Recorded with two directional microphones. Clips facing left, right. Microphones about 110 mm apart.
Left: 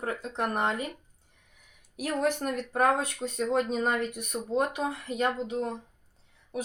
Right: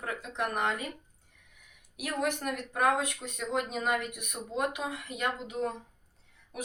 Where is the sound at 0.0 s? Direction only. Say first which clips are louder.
Left 3 dB; 35° left (ahead or behind).